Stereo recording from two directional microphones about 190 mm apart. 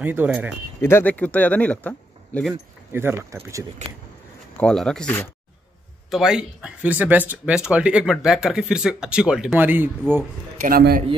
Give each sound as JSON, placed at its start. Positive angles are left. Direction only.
{"t": 0.0, "sound": "speech", "side_deg": -10}
{"t": 0.7, "sound": "speech", "side_deg": 15}
{"t": 2.9, "sound": "speech", "side_deg": -10}
{"t": 4.6, "sound": "speech", "side_deg": 5}
{"t": 10.6, "sound": "a man's voice", "side_deg": -50}